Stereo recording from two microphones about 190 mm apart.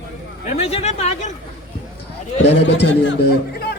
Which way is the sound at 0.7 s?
35° left (ahead or behind).